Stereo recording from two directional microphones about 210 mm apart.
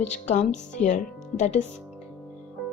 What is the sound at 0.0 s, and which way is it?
Speech, 35° left (ahead or behind).